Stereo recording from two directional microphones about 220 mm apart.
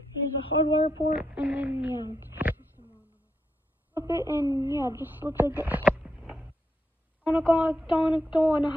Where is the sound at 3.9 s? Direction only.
10° right (ahead or behind).